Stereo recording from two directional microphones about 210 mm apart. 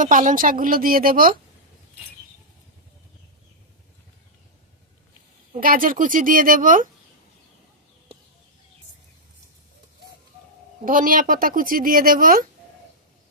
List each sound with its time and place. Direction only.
0.0 s speech: 40° right (ahead or behind)
5.5 s speech: 40° right (ahead or behind)
10.8 s speech: 40° right (ahead or behind)